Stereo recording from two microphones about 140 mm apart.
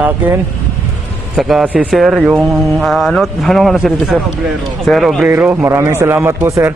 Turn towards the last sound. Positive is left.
turn(degrees=-20)  # may be behind; listen again after turning